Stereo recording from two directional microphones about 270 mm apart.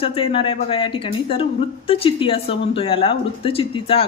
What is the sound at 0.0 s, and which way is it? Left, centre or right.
A woman's voice, centre.